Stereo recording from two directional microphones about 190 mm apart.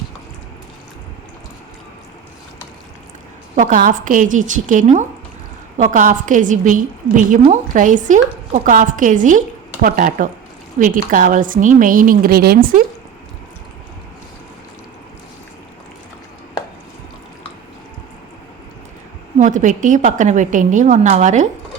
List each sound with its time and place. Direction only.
3.5 s a woman's voice: 45° right (ahead or behind)
19.4 s a woman's voice: 40° right (ahead or behind)